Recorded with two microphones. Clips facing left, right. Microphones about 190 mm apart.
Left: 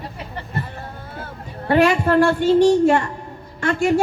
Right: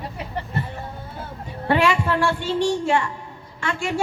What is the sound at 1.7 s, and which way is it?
A woman's voice, 40° left (ahead or behind).